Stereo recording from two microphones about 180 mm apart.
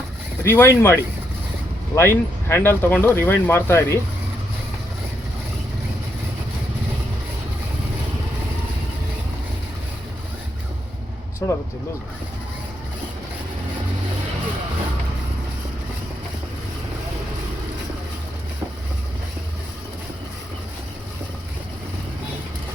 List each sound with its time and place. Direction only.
0.4 s speech: 15° left (ahead or behind)
2.0 s speech: 15° left (ahead or behind)
11.4 s speech: 20° left (ahead or behind)